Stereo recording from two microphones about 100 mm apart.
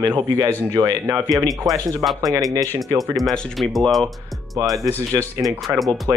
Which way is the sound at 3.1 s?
5° left (ahead or behind).